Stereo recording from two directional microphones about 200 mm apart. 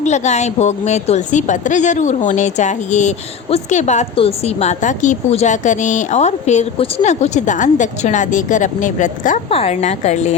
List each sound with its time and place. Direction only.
0.0 s speech: 35° left (ahead or behind)